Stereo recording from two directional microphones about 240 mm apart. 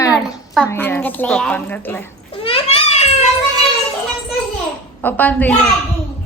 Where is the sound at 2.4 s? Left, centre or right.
Left.